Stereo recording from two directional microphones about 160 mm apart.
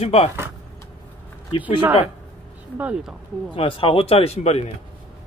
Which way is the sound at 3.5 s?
35° left (ahead or behind).